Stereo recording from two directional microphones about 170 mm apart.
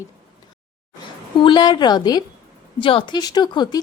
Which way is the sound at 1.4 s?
25° left (ahead or behind).